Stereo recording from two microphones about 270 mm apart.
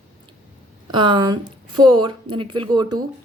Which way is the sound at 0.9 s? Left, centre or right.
Centre.